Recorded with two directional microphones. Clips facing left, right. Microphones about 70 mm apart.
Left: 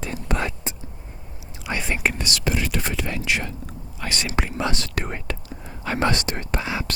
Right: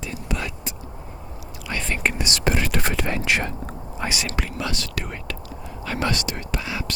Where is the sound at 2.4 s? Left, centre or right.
Right.